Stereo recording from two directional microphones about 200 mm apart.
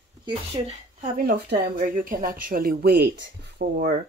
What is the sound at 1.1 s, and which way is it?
Speech, 50° right (ahead or behind).